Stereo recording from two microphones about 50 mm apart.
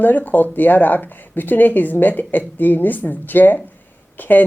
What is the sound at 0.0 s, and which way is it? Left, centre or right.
A woman's voice, left.